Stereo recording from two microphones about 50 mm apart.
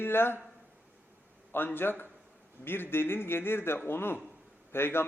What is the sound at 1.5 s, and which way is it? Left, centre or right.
A man's voice, left.